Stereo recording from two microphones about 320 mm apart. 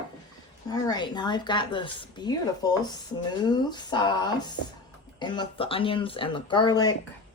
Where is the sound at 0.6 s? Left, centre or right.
Centre.